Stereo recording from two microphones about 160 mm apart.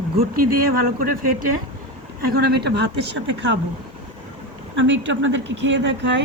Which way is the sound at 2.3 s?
90° right.